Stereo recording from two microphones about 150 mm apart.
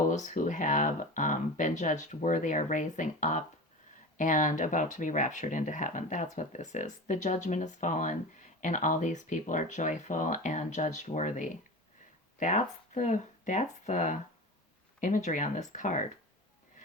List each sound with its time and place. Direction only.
0.1 s speech: 55° left (ahead or behind)